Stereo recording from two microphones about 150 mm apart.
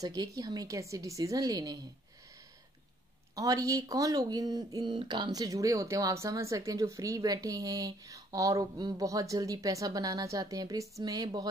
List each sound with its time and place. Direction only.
0.0 s speech: 25° right (ahead or behind)
3.3 s speech: 25° right (ahead or behind)